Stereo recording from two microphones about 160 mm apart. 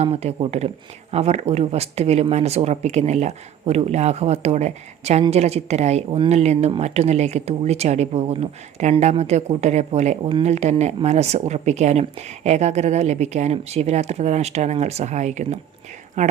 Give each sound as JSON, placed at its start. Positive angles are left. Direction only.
{"t": 0.0, "sound": "speech", "side_deg": -40}